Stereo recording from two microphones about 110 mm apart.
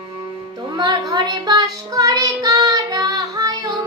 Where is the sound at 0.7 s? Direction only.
35° right (ahead or behind).